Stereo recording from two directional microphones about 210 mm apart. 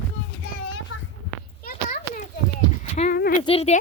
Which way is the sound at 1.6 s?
40° left (ahead or behind).